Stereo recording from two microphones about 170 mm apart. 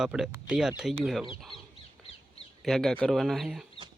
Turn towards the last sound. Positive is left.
turn(degrees=0)  # may be behind; listen again after turning